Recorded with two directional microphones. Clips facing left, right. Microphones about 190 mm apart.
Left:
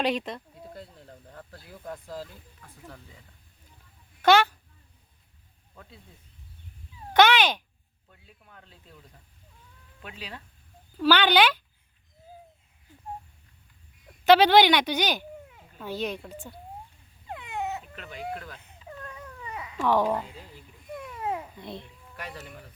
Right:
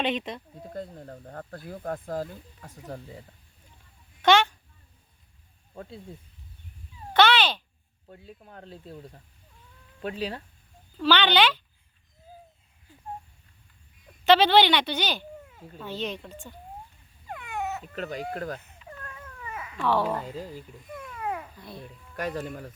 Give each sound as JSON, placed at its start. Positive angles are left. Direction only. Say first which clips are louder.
{"t": 0.1, "sound": "speech", "louder": "left 1 dB", "side_deg": 0}
{"t": 0.7, "sound": "speech", "louder": "right 9 dB", "side_deg": -45}
{"t": 4.2, "sound": "speech", "louder": "left 1 dB", "side_deg": 5}
{"t": 5.7, "sound": "speech", "louder": "right 10 dB", "side_deg": -40}
{"t": 7.1, "sound": "cat", "louder": "left 1 dB", "side_deg": 10}
{"t": 8.0, "sound": "speech", "louder": "right 10 dB", "side_deg": -35}
{"t": 10.9, "sound": "speech", "louder": "left 1 dB", "side_deg": 10}
{"t": 14.3, "sound": "speech", "louder": "left 2 dB", "side_deg": 10}
{"t": 17.2, "sound": "a sound", "louder": "even", "side_deg": 20}
{"t": 17.9, "sound": "speech", "louder": "right 4 dB", "side_deg": -40}
{"t": 18.6, "sound": "cat", "louder": "left 2 dB", "side_deg": 20}
{"t": 19.8, "sound": "speech", "louder": "left 2 dB", "side_deg": 15}
{"t": 20.9, "sound": "babbling", "louder": "left 1 dB", "side_deg": 20}
{"t": 22.1, "sound": "speech", "louder": "right 9 dB", "side_deg": -45}